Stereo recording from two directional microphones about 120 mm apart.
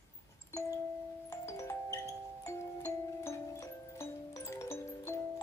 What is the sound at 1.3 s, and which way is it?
Music, 20° left (ahead or behind).